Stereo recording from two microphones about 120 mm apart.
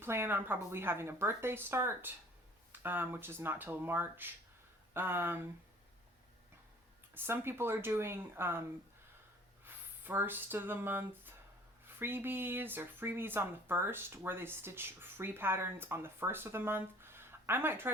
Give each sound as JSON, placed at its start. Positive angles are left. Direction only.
{"t": 0.0, "sound": "speech", "side_deg": -20}
{"t": 7.1, "sound": "speech", "side_deg": -20}
{"t": 9.6, "sound": "speech", "side_deg": -20}